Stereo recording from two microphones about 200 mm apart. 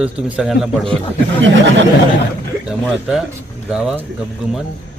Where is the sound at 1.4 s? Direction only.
70° right (ahead or behind).